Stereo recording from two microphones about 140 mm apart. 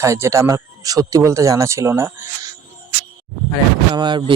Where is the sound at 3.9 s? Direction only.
30° right (ahead or behind).